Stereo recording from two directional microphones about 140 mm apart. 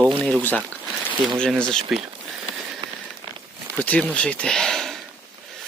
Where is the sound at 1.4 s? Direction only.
5° left (ahead or behind).